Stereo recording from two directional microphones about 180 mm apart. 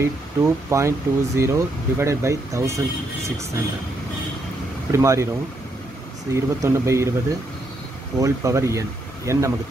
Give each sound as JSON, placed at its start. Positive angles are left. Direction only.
{"t": 0.0, "sound": "speech", "side_deg": -15}
{"t": 4.9, "sound": "speech", "side_deg": -15}
{"t": 6.3, "sound": "speech", "side_deg": -15}